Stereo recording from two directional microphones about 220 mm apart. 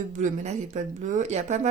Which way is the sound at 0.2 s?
35° right (ahead or behind).